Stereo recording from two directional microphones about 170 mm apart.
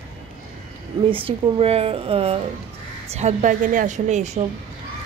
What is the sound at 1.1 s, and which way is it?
A woman's voice, 30° right (ahead or behind).